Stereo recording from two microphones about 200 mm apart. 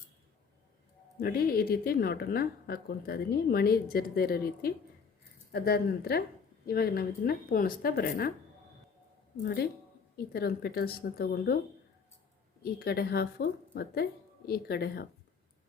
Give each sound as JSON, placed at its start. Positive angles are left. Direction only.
{"t": 1.2, "sound": "a woman's voice", "side_deg": 50}
{"t": 9.4, "sound": "a woman's voice", "side_deg": 50}
{"t": 12.6, "sound": "a woman's voice", "side_deg": 50}